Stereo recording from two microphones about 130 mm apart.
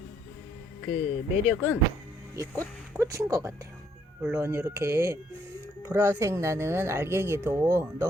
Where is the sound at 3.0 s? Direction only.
25° right (ahead or behind).